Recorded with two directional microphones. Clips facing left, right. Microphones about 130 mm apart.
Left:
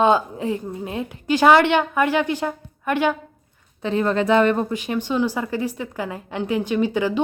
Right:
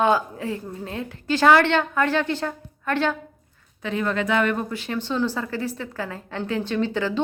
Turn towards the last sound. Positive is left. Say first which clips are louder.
# left 3 dB
turn(degrees=15)  # may be behind; listen again after turning